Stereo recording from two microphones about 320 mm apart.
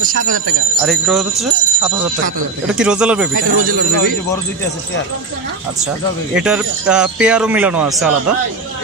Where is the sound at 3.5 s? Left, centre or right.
Right.